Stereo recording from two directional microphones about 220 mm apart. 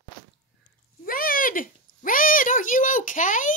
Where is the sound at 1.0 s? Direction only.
40° left (ahead or behind).